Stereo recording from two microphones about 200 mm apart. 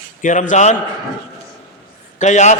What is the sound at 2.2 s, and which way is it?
Speech, 35° left (ahead or behind).